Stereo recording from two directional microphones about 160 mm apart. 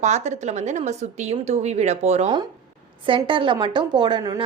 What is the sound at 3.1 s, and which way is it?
A woman's voice, 30° right (ahead or behind).